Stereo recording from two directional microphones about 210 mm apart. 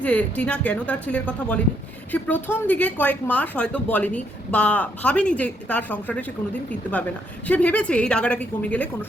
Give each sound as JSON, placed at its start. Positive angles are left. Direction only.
{"t": 0.0, "sound": "speech", "side_deg": 5}